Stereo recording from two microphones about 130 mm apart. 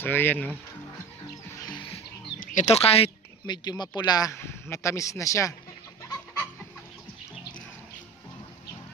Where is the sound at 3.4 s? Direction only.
35° left (ahead or behind).